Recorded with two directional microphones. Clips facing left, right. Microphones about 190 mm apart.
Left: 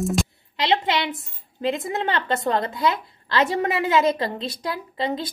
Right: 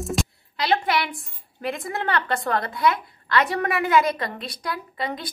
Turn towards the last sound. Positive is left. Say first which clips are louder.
# left 3 dB
turn(degrees=25)  # may be behind; listen again after turning